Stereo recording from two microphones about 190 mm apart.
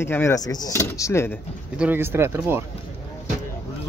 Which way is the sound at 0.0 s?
15° left (ahead or behind).